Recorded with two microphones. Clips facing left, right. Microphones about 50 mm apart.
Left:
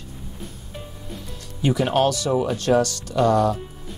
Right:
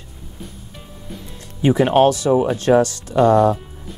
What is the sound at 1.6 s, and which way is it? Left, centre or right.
Speech, right.